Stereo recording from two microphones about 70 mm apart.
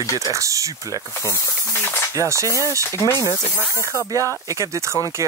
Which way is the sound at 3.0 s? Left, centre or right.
Left.